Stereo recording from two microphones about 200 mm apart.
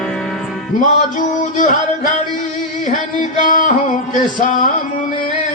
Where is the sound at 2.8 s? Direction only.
40° left (ahead or behind).